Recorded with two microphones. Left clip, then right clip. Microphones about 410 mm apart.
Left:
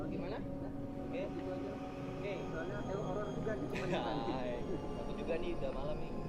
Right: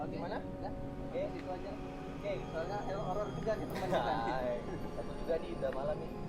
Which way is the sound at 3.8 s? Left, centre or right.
Centre.